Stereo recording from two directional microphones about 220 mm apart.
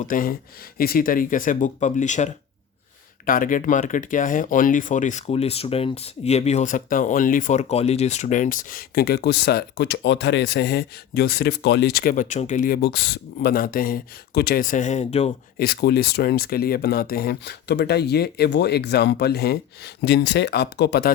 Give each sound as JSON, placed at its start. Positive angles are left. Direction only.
{"t": 0.0, "sound": "speech", "side_deg": 40}
{"t": 15.5, "sound": "speech", "side_deg": 45}